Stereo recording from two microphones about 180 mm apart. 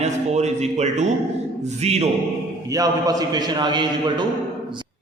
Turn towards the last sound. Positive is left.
turn(degrees=-25)  # may be behind; listen again after turning